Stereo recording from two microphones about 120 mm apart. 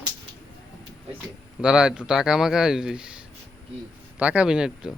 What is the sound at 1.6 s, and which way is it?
Speech, 10° right (ahead or behind).